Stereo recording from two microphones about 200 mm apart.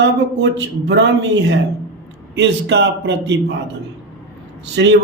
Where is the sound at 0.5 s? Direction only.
60° right (ahead or behind).